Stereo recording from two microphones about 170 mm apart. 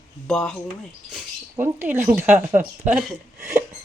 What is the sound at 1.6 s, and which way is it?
Speech, 10° right (ahead or behind).